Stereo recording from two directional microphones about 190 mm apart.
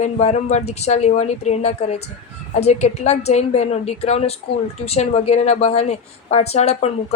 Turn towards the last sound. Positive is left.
turn(degrees=35)  # may be behind; listen again after turning